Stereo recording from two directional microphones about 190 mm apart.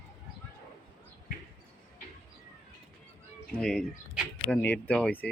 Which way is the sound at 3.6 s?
5° left (ahead or behind).